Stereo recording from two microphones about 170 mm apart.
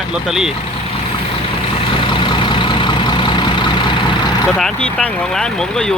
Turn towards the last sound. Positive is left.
turn(degrees=5)  # may be behind; listen again after turning